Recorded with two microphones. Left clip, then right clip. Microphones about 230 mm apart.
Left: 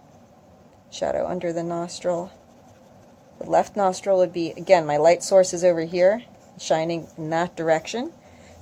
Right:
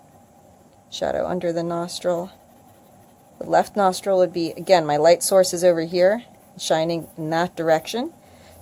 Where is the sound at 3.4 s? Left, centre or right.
Centre.